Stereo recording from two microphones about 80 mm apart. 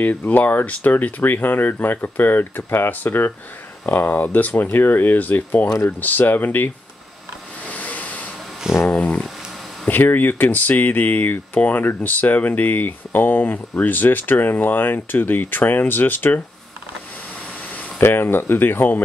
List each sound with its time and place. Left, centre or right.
0.0 s speech: left
7.6 s vehicle: centre
8.9 s a sound: centre
9.8 s speech: left
17.7 s speech: left